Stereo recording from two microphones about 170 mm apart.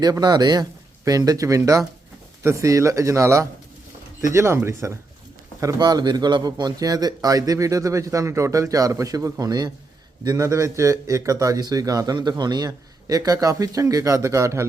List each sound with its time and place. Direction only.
0.0 s a man's voice: 25° right (ahead or behind)